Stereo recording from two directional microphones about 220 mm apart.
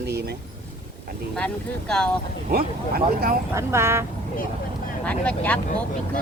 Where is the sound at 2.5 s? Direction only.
45° right (ahead or behind).